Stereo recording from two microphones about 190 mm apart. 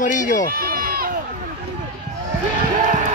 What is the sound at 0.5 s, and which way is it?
Run, 50° right (ahead or behind).